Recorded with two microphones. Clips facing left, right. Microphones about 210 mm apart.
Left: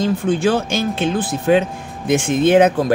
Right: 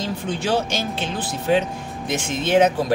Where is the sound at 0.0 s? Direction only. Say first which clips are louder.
Left 9 dB; 50° left (ahead or behind).